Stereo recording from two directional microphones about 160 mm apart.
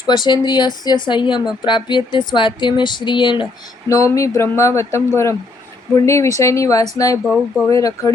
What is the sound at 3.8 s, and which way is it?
Speech, 20° left (ahead or behind).